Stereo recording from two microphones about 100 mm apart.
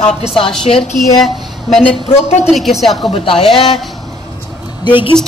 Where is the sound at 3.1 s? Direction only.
65° left (ahead or behind).